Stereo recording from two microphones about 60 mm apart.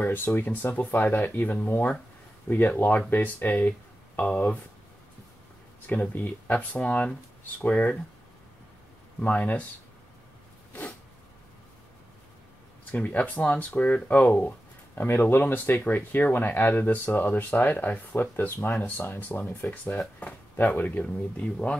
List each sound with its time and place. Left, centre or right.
0.0 s speech: left
5.9 s speech: left
9.2 s speech: left
12.9 s speech: left
15.0 s speech: left
20.2 s a sound: left
20.8 s speech: left